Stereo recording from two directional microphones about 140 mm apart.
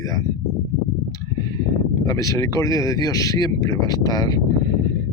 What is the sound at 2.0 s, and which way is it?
Speech, 25° left (ahead or behind).